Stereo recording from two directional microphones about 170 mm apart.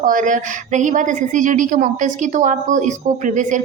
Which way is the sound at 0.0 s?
50° right (ahead or behind).